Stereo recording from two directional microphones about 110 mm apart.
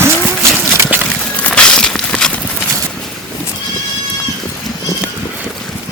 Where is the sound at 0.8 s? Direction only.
20° right (ahead or behind).